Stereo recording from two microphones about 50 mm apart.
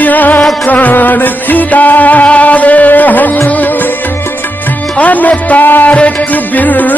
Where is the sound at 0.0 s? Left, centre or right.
Left.